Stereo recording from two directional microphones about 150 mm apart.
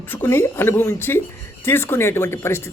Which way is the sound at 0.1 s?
15° left (ahead or behind).